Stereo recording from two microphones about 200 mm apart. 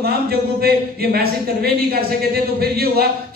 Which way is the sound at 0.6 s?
50° right (ahead or behind).